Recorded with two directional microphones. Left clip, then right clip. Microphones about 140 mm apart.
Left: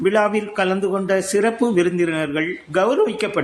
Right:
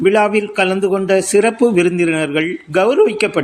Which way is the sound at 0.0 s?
25° right (ahead or behind).